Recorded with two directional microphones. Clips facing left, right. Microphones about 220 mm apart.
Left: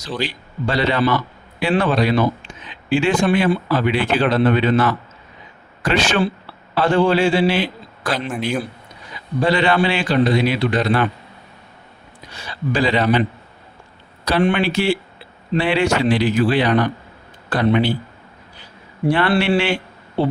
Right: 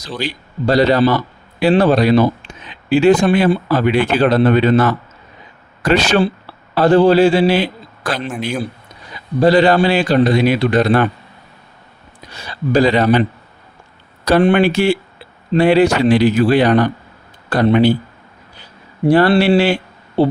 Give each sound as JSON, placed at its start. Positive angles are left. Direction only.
{"t": 0.2, "sound": "a man's voice", "side_deg": -40}
{"t": 9.4, "sound": "a man's voice", "side_deg": -35}
{"t": 12.3, "sound": "speech", "side_deg": -40}
{"t": 14.3, "sound": "a man's voice", "side_deg": -45}
{"t": 19.0, "sound": "a man's voice", "side_deg": -40}